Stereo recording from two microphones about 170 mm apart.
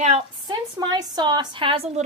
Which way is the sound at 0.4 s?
25° right (ahead or behind).